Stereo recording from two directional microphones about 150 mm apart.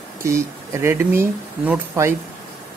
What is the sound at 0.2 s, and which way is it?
Speech, 20° right (ahead or behind).